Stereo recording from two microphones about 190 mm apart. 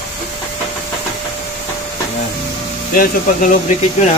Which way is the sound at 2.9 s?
45° left (ahead or behind).